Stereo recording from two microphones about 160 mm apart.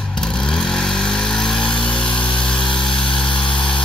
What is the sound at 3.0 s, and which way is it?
Vehicle, 5° left (ahead or behind).